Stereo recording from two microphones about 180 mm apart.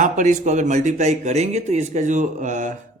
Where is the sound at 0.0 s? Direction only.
45° right (ahead or behind).